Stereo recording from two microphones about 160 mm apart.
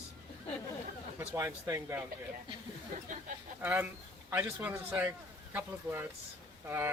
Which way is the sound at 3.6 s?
10° right (ahead or behind).